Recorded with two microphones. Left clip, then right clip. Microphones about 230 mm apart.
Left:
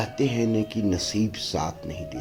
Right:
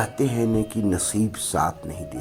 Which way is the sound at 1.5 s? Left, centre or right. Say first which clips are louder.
Right 9 dB; right.